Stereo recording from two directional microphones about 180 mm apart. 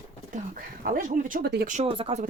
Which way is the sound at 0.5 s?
50° right (ahead or behind).